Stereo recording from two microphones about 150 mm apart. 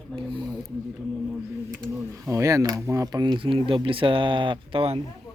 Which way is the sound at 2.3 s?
20° right (ahead or behind).